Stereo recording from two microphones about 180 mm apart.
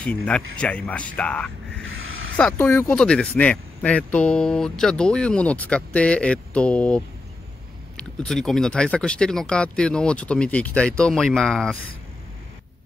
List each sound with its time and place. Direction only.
0.0 s speech: 5° left (ahead or behind)
1.9 s a sound: 90° right
2.3 s speech: 10° left (ahead or behind)
8.0 s speech: 5° left (ahead or behind)